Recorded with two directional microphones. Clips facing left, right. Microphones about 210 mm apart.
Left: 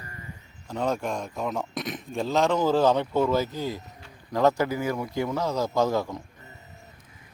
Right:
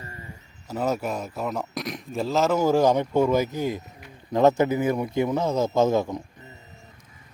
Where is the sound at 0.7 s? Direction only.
5° right (ahead or behind).